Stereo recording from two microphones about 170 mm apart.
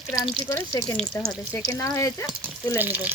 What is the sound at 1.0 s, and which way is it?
Speech, 5° left (ahead or behind).